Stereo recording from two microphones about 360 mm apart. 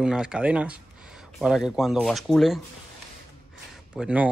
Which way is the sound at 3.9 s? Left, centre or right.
Centre.